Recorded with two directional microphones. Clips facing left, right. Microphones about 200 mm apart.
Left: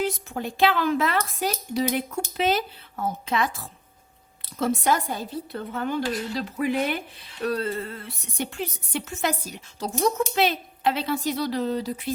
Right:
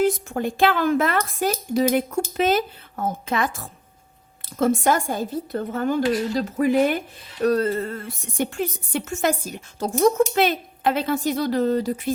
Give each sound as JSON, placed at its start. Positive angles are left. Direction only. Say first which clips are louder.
{"t": 0.0, "sound": "a woman's voice", "louder": "right 6 dB", "side_deg": -50}